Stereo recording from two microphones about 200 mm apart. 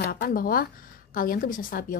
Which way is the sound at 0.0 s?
50° left (ahead or behind).